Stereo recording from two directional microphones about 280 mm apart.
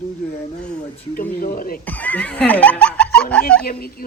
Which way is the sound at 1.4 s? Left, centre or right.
Left.